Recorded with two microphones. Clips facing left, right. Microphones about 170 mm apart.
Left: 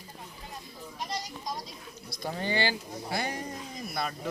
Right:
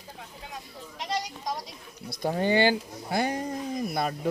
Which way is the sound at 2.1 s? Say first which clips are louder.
Right 7 dB; 50° right (ahead or behind).